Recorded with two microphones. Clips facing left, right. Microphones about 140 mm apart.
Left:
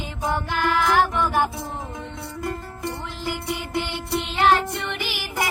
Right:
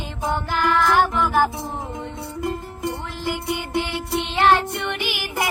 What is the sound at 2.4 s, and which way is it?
Music, 20° right (ahead or behind).